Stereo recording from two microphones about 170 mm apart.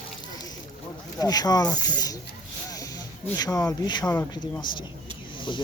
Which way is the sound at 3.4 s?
20° left (ahead or behind).